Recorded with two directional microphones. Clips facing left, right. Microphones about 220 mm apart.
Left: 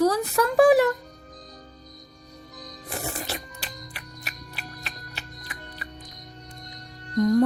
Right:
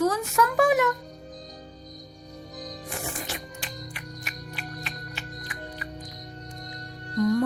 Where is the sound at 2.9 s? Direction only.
40° left (ahead or behind).